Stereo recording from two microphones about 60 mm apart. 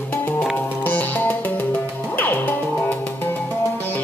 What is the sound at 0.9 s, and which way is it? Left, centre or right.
Music, left.